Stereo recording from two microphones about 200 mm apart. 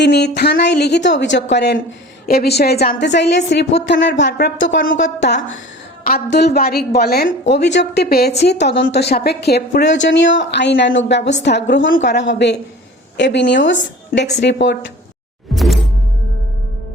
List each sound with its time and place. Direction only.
0.0 s a woman's voice: 55° left (ahead or behind)
15.5 s music: centre (ahead or behind)